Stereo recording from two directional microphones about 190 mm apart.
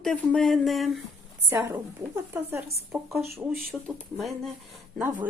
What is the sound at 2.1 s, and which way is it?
Speech, 10° right (ahead or behind).